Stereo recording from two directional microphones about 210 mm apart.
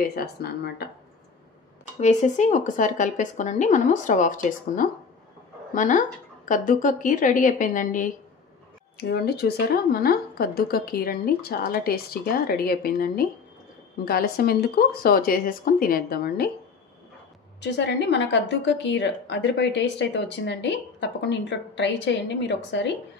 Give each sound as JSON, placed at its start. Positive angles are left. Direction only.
{"t": 0.0, "sound": "a woman's voice", "side_deg": 45}
{"t": 2.0, "sound": "speech", "side_deg": 35}
{"t": 8.9, "sound": "a woman's voice", "side_deg": 50}
{"t": 17.6, "sound": "a woman's voice", "side_deg": 55}